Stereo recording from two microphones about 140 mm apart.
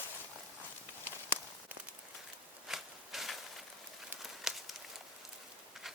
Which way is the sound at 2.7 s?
Centre (ahead or behind).